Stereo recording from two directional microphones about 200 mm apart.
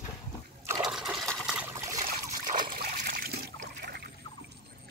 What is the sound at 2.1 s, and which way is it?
Trickle, 45° right (ahead or behind).